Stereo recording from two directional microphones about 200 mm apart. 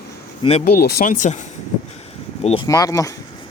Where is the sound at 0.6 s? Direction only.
45° left (ahead or behind); by 2.7 s 25° left (ahead or behind).